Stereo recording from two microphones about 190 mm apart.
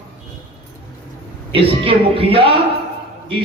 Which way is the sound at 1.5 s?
30° right (ahead or behind).